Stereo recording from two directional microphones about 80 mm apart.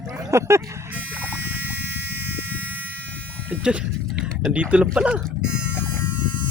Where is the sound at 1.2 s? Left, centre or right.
Right.